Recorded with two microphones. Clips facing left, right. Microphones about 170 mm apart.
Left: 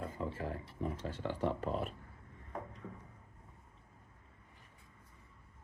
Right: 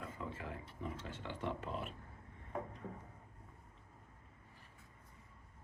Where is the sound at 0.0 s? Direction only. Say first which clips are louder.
Left 6 dB; 30° left (ahead or behind).